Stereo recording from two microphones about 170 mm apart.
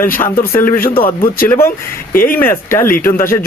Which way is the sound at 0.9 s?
30° left (ahead or behind).